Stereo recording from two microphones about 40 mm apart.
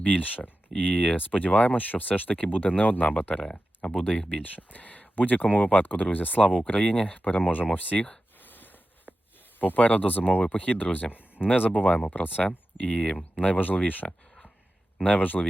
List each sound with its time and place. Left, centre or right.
0.0 s speech: left
3.5 s speech: left
4.4 s speech: left
8.4 s a sound: left
9.6 s speech: left